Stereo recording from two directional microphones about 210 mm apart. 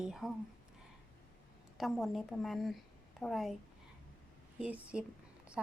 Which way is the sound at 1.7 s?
Centre (ahead or behind).